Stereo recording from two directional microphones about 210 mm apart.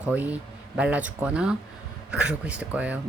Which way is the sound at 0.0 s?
5° right (ahead or behind).